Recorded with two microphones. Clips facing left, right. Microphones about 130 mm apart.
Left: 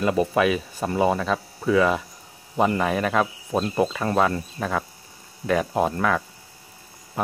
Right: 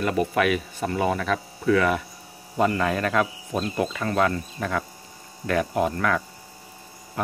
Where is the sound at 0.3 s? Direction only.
25° left (ahead or behind).